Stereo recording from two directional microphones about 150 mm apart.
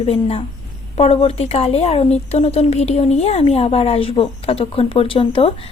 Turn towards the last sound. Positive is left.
turn(degrees=35)  # may be behind; listen again after turning